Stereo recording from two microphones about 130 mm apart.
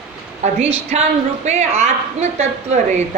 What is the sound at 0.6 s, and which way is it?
A woman's voice, 55° right (ahead or behind).